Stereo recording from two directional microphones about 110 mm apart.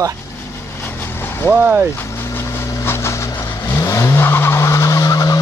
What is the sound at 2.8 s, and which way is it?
Vehicle, 25° left (ahead or behind).